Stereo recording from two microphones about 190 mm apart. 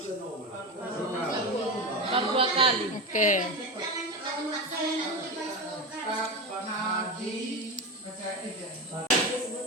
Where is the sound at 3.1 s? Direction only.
40° left (ahead or behind).